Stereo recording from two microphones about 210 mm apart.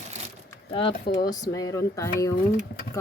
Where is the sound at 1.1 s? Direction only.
50° left (ahead or behind).